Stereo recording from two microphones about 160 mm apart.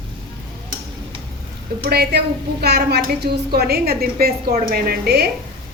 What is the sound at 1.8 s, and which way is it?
A woman's voice, 80° right.